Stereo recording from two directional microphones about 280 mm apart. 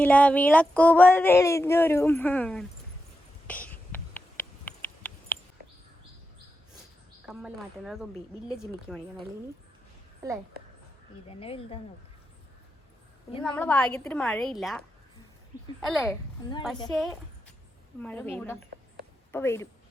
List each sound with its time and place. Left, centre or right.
0.0 s speech: centre
3.4 s a sound: centre
7.3 s a woman's voice: centre
10.2 s a woman's voice: centre
11.3 s speech: centre
13.5 s a woman's voice: centre
15.8 s a woman's voice: centre